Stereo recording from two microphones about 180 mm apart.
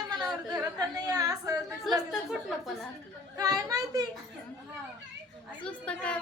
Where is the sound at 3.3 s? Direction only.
20° right (ahead or behind).